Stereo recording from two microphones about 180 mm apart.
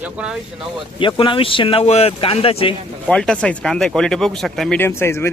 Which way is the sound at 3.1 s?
5° left (ahead or behind).